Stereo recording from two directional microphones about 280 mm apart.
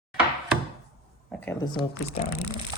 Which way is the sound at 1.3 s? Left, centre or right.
Centre.